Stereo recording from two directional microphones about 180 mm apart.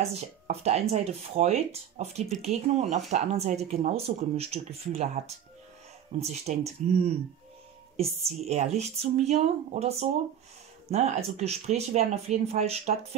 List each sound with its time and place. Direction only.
0.0 s speech: 35° right (ahead or behind)
6.1 s speech: 35° right (ahead or behind)